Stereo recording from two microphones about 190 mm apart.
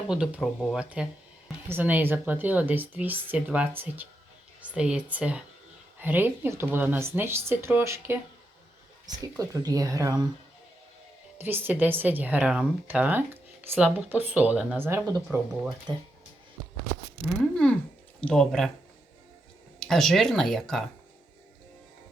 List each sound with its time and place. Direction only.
0.1 s speech: 5° right (ahead or behind)
9.4 s speech: 20° right (ahead or behind)
11.3 s speech: 10° right (ahead or behind)
17.5 s speech: 5° left (ahead or behind)
19.8 s speech: centre (ahead or behind)